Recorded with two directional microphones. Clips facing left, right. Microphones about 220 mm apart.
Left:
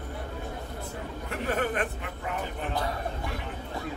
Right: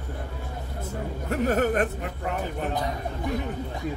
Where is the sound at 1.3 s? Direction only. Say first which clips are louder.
Right 6 dB; 40° right (ahead or behind).